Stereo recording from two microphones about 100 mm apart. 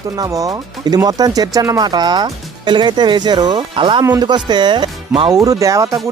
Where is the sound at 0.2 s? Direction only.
35° right (ahead or behind); by 5.3 s 55° right (ahead or behind).